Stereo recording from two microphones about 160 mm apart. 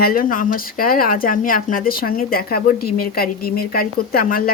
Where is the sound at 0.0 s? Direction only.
60° left (ahead or behind).